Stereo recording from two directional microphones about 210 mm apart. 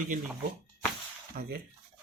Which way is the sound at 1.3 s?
45° right (ahead or behind).